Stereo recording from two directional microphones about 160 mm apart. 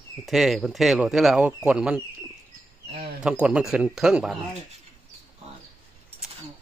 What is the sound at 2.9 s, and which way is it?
Speech, 70° right (ahead or behind).